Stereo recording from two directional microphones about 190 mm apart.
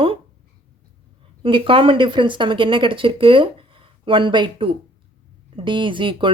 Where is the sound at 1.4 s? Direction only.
25° right (ahead or behind).